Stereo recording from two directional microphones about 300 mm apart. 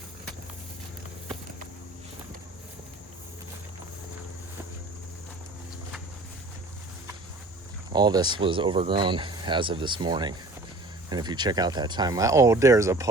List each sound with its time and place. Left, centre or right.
7.9 s speech: centre